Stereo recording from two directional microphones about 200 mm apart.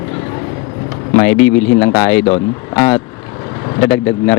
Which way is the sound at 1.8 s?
15° left (ahead or behind).